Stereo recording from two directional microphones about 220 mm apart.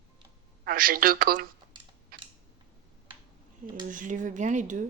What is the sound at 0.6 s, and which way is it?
Speech, 40° right (ahead or behind).